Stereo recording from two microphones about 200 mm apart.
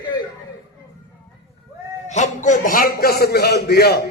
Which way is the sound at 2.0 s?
35° left (ahead or behind).